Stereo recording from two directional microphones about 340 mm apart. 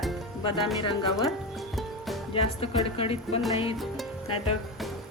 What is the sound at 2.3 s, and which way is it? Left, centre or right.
Speech, centre.